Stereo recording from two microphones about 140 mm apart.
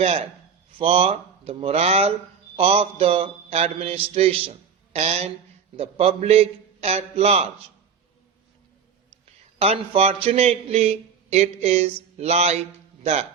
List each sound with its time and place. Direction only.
0.0 s a man's voice: 45° right (ahead or behind)
9.2 s a man's voice: 45° right (ahead or behind)